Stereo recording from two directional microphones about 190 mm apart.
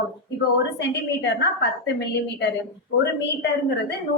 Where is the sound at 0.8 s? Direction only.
65° left (ahead or behind).